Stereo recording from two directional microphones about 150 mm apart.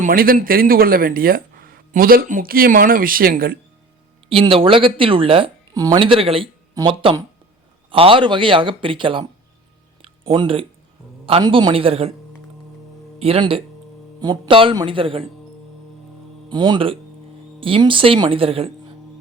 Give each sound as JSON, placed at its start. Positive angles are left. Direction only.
{"t": 0.0, "sound": "speech", "side_deg": -70}
{"t": 4.3, "sound": "speech", "side_deg": -35}
{"t": 5.7, "sound": "speech", "side_deg": -25}
{"t": 10.0, "sound": "a sound", "side_deg": -35}
{"t": 11.4, "sound": "speech", "side_deg": -30}
{"t": 13.1, "sound": "speech", "side_deg": -40}
{"t": 16.5, "sound": "speech", "side_deg": -30}